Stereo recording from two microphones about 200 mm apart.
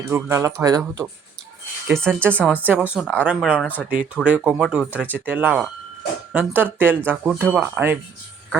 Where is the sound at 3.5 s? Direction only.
10° left (ahead or behind).